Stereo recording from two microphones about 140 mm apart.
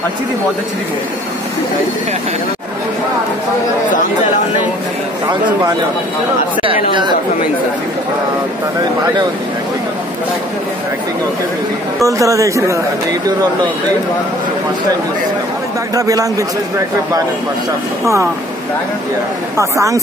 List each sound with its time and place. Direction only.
6.9 s speech: 35° right (ahead or behind)
12.0 s a man's voice: 20° right (ahead or behind)
15.9 s a man's voice: 25° right (ahead or behind)
18.0 s a man's voice: 20° right (ahead or behind)
19.5 s a man's voice: 20° right (ahead or behind)